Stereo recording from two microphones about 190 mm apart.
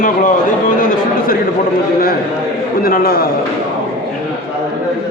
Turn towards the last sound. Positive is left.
turn(degrees=50)  # may be behind; listen again after turning